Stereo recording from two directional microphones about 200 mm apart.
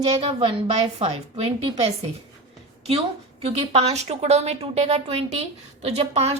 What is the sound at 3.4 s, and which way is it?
A woman's voice, 30° right (ahead or behind).